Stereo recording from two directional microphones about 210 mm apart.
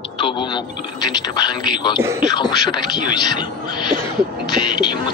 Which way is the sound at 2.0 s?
15° right (ahead or behind).